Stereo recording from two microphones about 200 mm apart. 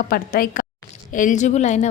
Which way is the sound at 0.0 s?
45° left (ahead or behind).